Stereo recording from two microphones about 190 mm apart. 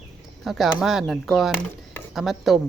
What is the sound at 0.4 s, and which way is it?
Speech, centre (ahead or behind).